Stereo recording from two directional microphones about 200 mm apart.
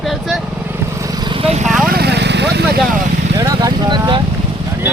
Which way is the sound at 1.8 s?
50° right (ahead or behind).